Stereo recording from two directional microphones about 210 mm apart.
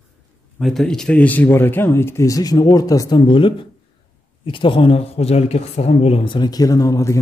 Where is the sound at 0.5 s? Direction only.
Centre (ahead or behind).